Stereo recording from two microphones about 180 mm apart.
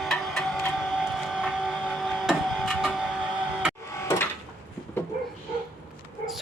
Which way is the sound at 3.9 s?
15° left (ahead or behind).